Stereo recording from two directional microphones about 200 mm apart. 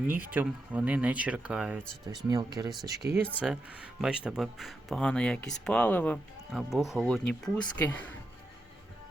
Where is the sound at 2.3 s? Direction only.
20° right (ahead or behind).